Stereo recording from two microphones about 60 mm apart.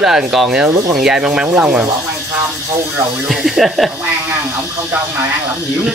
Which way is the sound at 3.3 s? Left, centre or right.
Centre.